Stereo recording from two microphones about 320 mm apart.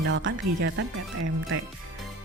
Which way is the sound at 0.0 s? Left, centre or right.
Right.